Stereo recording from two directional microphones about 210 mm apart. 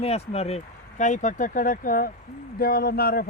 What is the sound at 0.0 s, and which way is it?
Speech, 30° left (ahead or behind).